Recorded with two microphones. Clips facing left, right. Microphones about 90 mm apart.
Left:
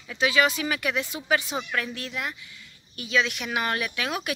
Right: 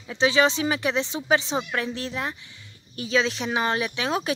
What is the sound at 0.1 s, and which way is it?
Speech, 30° right (ahead or behind).